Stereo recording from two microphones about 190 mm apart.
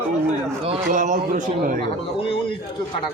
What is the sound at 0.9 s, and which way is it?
Speech, 45° right (ahead or behind).